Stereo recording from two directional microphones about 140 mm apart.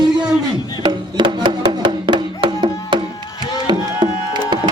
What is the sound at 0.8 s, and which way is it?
Music, 35° right (ahead or behind).